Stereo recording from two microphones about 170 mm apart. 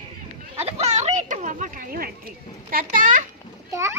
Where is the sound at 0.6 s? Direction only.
40° right (ahead or behind).